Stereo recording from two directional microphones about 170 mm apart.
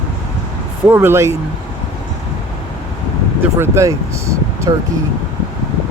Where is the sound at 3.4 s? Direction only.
15° right (ahead or behind).